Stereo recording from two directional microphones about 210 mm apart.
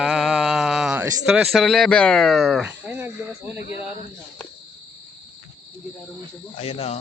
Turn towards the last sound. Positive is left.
turn(degrees=30)  # may be behind; listen again after turning